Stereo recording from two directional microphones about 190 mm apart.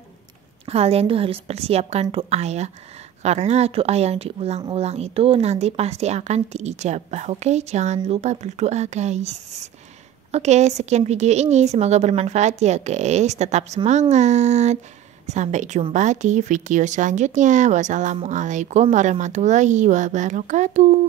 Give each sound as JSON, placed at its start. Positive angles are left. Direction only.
{"t": 0.7, "sound": "speech", "side_deg": -30}